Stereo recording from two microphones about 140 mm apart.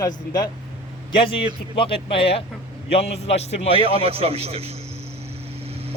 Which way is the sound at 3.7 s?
40° right (ahead or behind).